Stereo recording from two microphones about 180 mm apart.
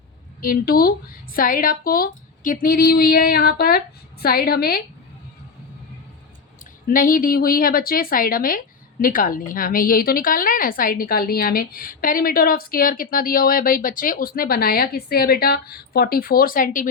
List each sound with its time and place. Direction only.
0.4 s speech: 55° left (ahead or behind)
6.8 s a woman's voice: 50° left (ahead or behind)